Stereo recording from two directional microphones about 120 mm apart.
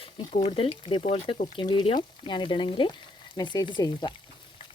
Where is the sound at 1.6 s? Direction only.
40° left (ahead or behind).